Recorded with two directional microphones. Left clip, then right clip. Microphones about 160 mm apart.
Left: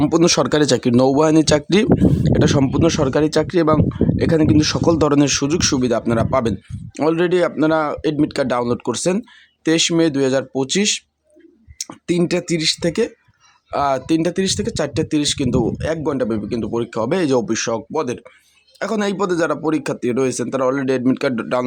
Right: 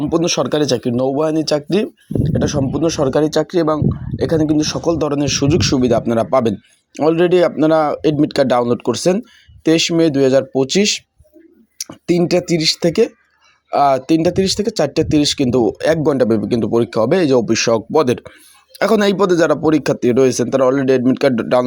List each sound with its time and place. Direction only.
0.1 s speech: 15° left (ahead or behind)
5.2 s a man's voice: centre (ahead or behind)